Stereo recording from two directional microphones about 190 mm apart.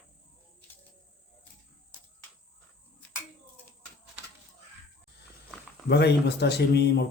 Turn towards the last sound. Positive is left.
turn(degrees=60)  # may be behind; listen again after turning